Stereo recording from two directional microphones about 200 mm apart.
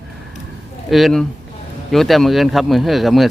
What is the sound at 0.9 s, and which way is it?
Speech, centre (ahead or behind).